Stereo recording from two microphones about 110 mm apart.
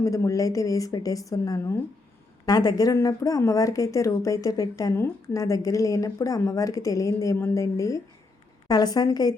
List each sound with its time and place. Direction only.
0.0 s a woman's voice: 30° left (ahead or behind)
2.5 s a woman's voice: 40° left (ahead or behind)